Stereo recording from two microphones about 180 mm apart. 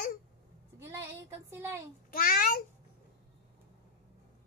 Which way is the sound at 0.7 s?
15° right (ahead or behind).